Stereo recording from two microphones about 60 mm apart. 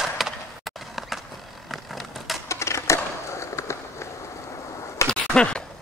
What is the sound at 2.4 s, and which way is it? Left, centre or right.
Skateboard, left.